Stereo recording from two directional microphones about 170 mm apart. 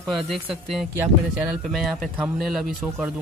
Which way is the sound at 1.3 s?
Centre (ahead or behind).